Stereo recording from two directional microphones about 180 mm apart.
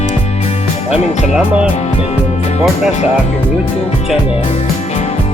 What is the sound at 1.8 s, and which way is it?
Speech, 35° left (ahead or behind).